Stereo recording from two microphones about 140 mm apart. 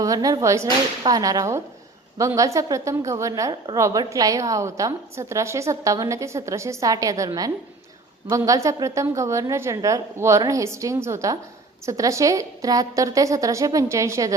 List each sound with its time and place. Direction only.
0.0 s a woman's voice: 25° right (ahead or behind)
8.3 s a woman's voice: 25° right (ahead or behind)